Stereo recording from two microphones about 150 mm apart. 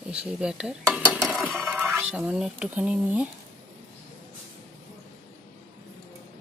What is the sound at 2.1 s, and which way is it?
Speech, 5° right (ahead or behind).